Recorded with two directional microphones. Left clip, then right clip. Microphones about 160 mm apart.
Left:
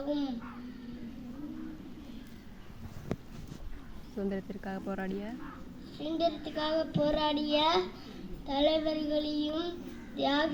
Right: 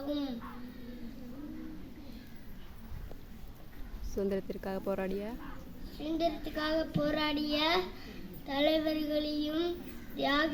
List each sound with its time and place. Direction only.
0.0 s a child's voice: 5° right (ahead or behind)
4.1 s speech: 50° right (ahead or behind)
6.0 s a child's voice: 5° right (ahead or behind)